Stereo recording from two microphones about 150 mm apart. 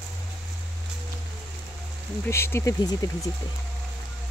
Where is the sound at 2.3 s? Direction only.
15° left (ahead or behind).